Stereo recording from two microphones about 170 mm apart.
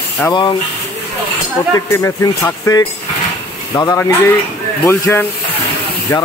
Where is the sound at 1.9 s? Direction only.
15° left (ahead or behind).